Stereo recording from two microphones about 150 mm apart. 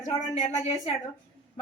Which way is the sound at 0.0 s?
50° left (ahead or behind).